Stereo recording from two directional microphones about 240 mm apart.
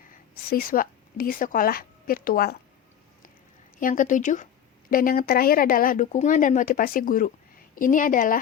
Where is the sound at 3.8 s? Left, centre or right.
Left.